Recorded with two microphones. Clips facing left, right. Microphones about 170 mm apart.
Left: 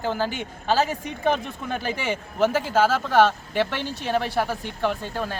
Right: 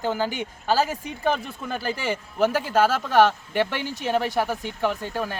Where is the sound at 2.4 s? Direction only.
10° right (ahead or behind).